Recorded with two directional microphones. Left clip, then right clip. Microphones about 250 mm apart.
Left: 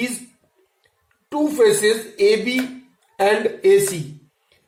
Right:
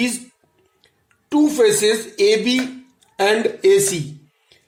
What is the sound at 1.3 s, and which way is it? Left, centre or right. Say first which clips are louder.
Speech: right 1 dB; right.